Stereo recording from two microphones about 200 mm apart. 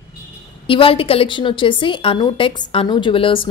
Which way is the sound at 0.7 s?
25° left (ahead or behind).